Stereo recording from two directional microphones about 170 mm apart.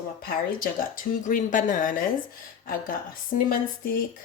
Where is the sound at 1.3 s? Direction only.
50° left (ahead or behind).